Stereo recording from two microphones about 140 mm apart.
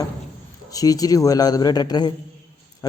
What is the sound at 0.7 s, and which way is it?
A man's voice, 25° left (ahead or behind).